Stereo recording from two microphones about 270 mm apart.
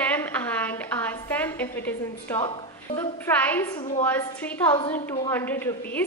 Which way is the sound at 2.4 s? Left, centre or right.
Centre.